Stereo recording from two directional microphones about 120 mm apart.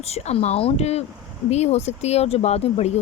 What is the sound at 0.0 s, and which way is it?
Speech, 60° left (ahead or behind).